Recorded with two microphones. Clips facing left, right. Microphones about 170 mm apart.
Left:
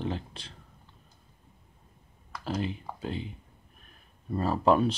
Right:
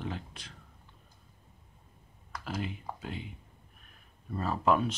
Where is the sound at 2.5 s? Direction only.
30° left (ahead or behind).